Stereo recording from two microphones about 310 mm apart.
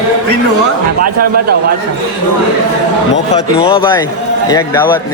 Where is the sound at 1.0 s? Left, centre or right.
Right.